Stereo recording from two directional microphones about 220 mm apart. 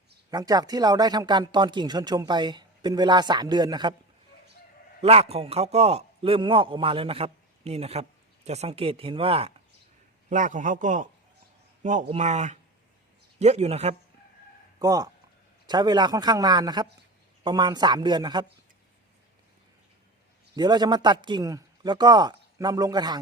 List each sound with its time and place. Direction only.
0.3 s speech: 15° right (ahead or behind)
4.9 s speech: 25° right (ahead or behind)
10.2 s a man's voice: 35° right (ahead or behind)
14.8 s speech: 15° right (ahead or behind)
20.6 s speech: 20° right (ahead or behind)